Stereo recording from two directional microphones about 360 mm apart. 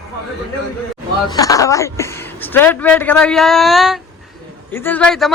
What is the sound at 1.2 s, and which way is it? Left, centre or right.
Speech, centre.